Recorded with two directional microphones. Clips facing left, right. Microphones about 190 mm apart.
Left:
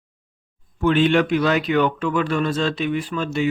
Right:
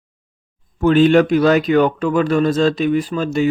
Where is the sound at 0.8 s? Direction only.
40° right (ahead or behind).